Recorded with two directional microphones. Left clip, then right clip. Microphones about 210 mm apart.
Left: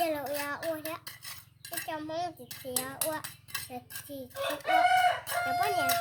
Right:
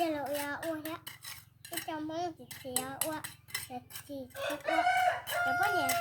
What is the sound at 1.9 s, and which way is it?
A child's voice, 30° left (ahead or behind).